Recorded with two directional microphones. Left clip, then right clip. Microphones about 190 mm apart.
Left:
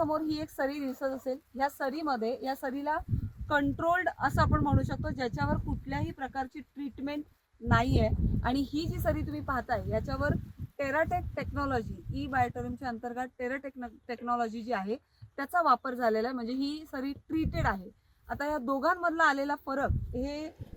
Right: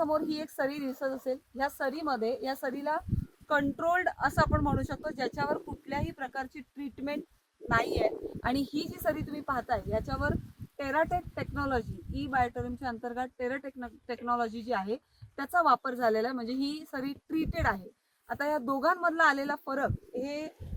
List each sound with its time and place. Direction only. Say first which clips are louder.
0.0 s a woman's voice: right 1 dB; 15° right (ahead or behind); by 7.1 s 50° right (ahead or behind)
7.7 s a woman's voice: right 1 dB; 30° right (ahead or behind); by 10.0 s 5° left (ahead or behind)
10.1 s a woman's voice: even; 20° left (ahead or behind)
15.5 s a woman's voice: right 1 dB; 10° left (ahead or behind); by 20.5 s 15° right (ahead or behind)